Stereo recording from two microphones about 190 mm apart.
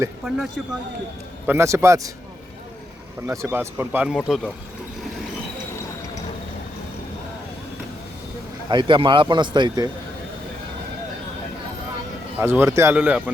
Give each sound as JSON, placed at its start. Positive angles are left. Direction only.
{"t": 0.3, "sound": "speech", "side_deg": 0}
{"t": 1.5, "sound": "speech", "side_deg": -15}
{"t": 3.2, "sound": "speech", "side_deg": -15}
{"t": 8.7, "sound": "a man's voice", "side_deg": -25}
{"t": 12.4, "sound": "speech", "side_deg": -10}